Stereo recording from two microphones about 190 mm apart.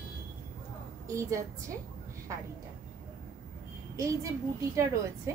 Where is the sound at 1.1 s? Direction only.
15° right (ahead or behind).